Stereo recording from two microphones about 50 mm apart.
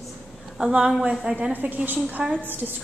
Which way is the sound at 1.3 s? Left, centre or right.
Right.